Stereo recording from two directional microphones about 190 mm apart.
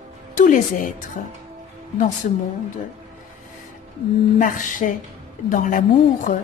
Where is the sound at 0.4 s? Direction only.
45° left (ahead or behind).